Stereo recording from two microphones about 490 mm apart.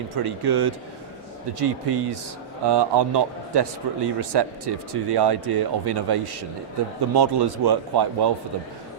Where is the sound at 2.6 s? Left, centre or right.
Right.